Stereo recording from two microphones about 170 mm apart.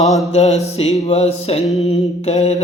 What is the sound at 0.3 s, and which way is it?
Mantra, 40° left (ahead or behind).